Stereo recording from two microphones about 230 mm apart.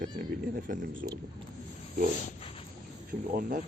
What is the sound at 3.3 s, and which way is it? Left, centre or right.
Speech, right.